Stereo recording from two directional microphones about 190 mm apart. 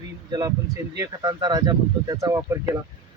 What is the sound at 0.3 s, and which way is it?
Speech, 20° right (ahead or behind).